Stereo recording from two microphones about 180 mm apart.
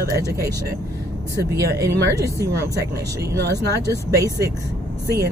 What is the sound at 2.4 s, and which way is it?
Speech, 70° right (ahead or behind).